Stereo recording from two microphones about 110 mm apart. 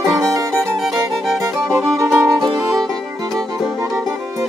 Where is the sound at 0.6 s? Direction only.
Centre (ahead or behind).